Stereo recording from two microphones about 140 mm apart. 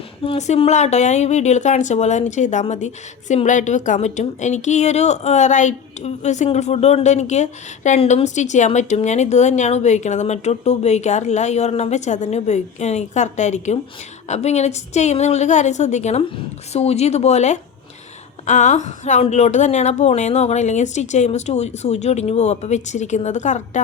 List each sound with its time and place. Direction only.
0.3 s speech: 50° left (ahead or behind)